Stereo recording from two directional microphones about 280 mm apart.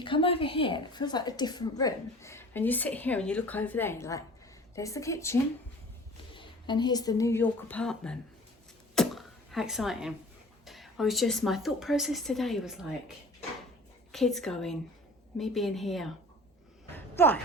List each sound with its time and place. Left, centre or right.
0.0 s a woman's voice: centre
9.0 s sneeze: centre
10.7 s a woman's voice: centre
16.9 s a sound: centre